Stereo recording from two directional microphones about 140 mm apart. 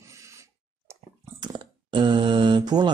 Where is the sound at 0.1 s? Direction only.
20° right (ahead or behind).